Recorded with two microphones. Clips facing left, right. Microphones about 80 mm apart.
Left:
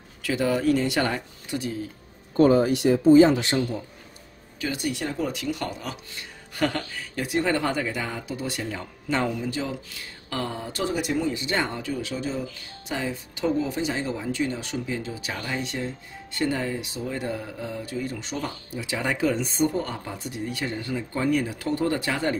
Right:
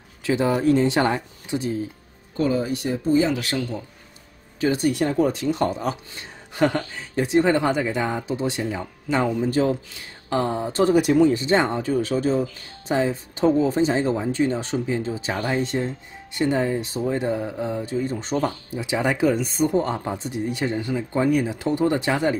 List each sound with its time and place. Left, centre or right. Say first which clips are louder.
0.2 s speech: right 3 dB; right
2.3 s speech: left 5 dB; left
2.6 s speech: left 5 dB; left
3.3 s a man's voice: left 1 dB; left
4.6 s speech: right 8 dB; right
9.5 s speech: right 9 dB; right
10.3 s speech: right 8 dB; right
10.9 s speech: right 9 dB; right
11.3 s speech: right 7 dB; right
16.3 s speech: right 5 dB; right
19.4 s speech: right 2 dB; centre
19.7 s speech: right 7 dB; right